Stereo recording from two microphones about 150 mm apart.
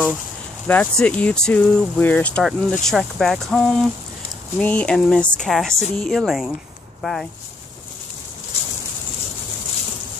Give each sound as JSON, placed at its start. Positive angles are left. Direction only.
{"t": 0.7, "sound": "speech", "side_deg": 10}